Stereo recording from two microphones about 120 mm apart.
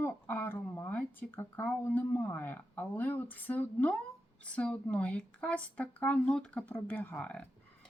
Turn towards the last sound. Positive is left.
turn(degrees=10)  # may be behind; listen again after turning